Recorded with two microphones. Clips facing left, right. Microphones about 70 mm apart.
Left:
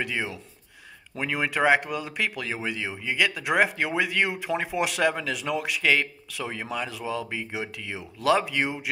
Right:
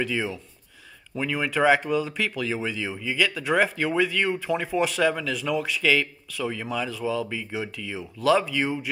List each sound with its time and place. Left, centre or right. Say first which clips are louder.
0.0 s speech: right 3 dB; centre